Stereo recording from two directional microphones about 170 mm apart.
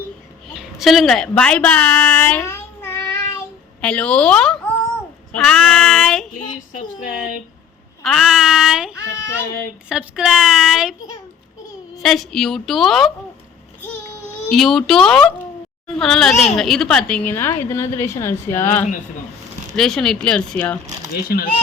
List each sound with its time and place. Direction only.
0.8 s a woman's voice: centre (ahead or behind)
6.7 s a sound: 55° left (ahead or behind)
8.0 s a woman's voice: centre (ahead or behind)
11.9 s a woman's voice: centre (ahead or behind)
14.5 s a woman's voice: centre (ahead or behind)
21.2 s speech: 60° left (ahead or behind)